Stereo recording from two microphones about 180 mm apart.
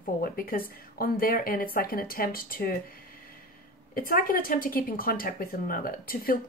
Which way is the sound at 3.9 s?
50° left (ahead or behind).